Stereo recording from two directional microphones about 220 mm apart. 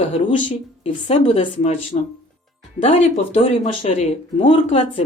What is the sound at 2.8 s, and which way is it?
Speech, 30° left (ahead or behind).